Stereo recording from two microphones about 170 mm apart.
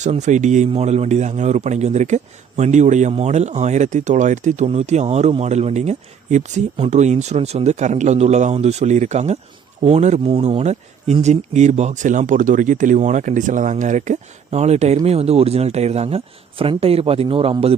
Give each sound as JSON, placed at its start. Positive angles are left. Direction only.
{"t": 0.0, "sound": "a man's voice", "side_deg": -45}